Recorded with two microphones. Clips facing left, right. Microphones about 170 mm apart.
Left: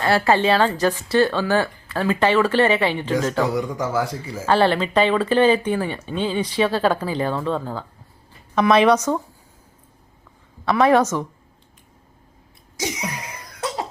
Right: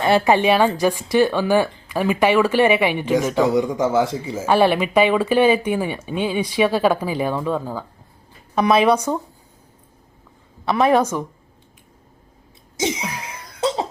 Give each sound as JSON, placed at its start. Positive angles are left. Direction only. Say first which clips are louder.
{"t": 0.0, "sound": "speech", "louder": "right 2 dB", "side_deg": -15}
{"t": 3.4, "sound": "speech", "louder": "right 5 dB", "side_deg": -20}
{"t": 10.7, "sound": "speech", "louder": "even", "side_deg": -20}
{"t": 12.7, "sound": "a sound", "louder": "right 4 dB", "side_deg": -25}
{"t": 13.2, "sound": "cough", "louder": "right 6 dB", "side_deg": -25}